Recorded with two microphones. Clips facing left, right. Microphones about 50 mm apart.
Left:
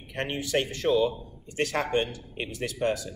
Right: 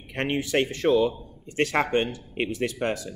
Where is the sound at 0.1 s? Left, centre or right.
Right.